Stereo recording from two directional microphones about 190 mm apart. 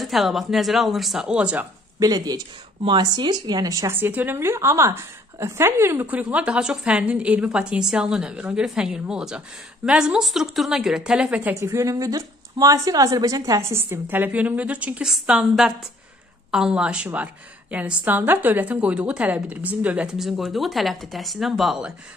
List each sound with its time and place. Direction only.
0.0 s a woman's voice: centre (ahead or behind)
2.0 s a woman's voice: 20° right (ahead or behind); by 21.9 s centre (ahead or behind)